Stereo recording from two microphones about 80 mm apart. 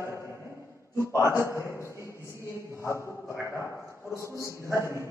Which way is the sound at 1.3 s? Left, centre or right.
Left.